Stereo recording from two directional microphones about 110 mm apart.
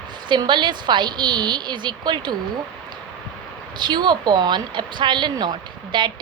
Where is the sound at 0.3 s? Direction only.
45° right (ahead or behind).